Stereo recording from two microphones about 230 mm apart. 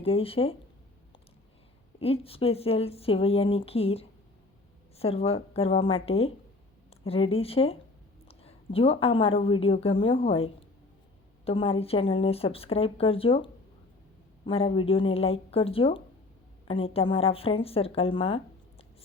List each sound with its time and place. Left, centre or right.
0.0 s a woman's voice: left
2.0 s a woman's voice: left